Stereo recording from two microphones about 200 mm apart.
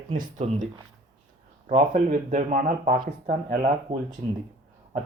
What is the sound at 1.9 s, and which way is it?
Speech, 40° right (ahead or behind).